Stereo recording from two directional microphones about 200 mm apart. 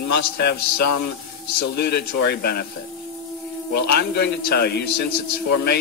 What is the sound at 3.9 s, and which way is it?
Speech, 55° left (ahead or behind).